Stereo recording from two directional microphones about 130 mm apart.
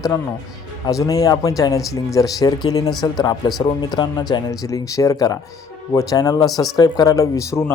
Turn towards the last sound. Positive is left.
turn(degrees=25)  # may be behind; listen again after turning